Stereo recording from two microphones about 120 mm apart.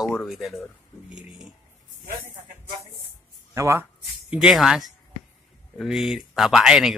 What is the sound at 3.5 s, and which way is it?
Speech, 25° right (ahead or behind).